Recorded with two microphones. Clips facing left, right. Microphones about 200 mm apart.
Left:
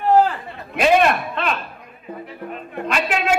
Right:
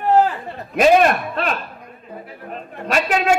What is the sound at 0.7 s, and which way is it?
Speech, 40° right (ahead or behind).